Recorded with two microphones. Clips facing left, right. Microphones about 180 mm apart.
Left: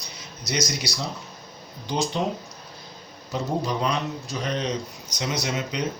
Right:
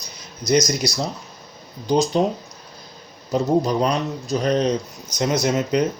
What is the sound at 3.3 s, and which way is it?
Speech, 40° right (ahead or behind).